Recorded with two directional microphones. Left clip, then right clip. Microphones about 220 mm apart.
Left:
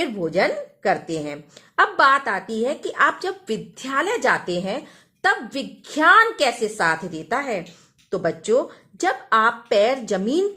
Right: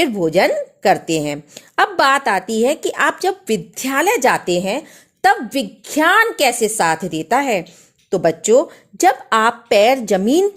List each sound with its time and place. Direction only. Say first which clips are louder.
0.0 s a woman's voice: right 6 dB; 35° right (ahead or behind)